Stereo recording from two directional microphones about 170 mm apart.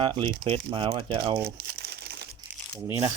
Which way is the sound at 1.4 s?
65° right (ahead or behind).